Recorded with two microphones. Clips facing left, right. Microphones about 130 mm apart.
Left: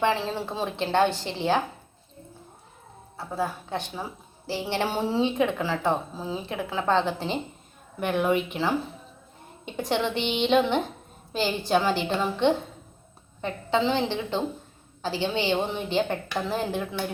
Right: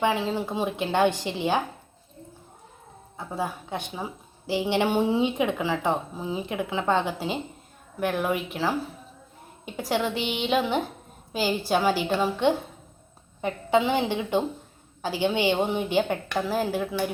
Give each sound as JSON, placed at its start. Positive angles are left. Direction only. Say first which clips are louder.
{"t": 0.0, "sound": "a woman's voice", "louder": "right 1 dB", "side_deg": -15}
{"t": 3.2, "sound": "a woman's voice", "louder": "left 1 dB", "side_deg": -15}